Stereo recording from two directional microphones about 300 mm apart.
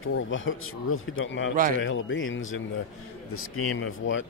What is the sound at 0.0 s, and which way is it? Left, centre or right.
Speech, left.